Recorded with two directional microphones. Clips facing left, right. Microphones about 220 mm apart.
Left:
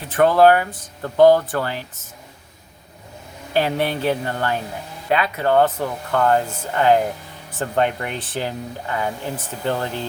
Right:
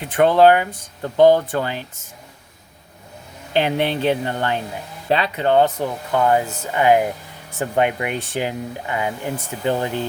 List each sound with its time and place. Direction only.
0.0 s speech: 15° right (ahead or behind)
3.5 s speech: 20° right (ahead or behind)